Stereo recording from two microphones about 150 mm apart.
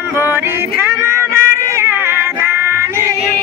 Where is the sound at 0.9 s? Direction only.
20° right (ahead or behind).